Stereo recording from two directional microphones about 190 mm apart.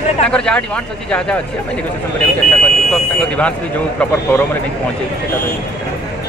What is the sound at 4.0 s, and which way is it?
Speech, 10° left (ahead or behind).